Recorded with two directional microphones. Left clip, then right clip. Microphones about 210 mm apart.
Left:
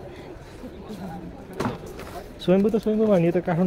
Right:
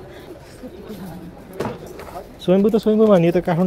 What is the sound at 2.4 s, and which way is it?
Speech, 10° right (ahead or behind).